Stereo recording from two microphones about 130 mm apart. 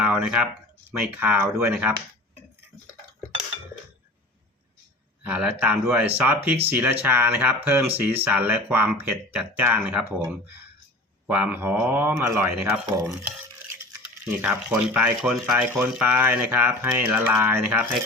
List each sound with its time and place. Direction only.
0.0 s speech: 15° right (ahead or behind)
5.2 s speech: 10° right (ahead or behind)